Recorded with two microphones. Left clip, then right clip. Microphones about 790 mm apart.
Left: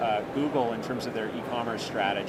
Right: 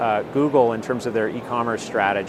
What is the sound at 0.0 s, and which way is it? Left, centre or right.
Speech, right.